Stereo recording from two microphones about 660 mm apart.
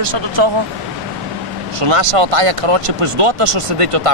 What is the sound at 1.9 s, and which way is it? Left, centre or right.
Speech, right.